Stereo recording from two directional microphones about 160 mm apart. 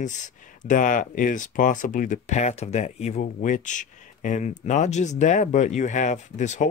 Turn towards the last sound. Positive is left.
turn(degrees=50)  # may be behind; listen again after turning